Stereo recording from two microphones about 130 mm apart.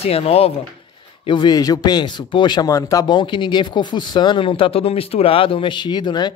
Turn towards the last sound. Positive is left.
turn(degrees=35)  # may be behind; listen again after turning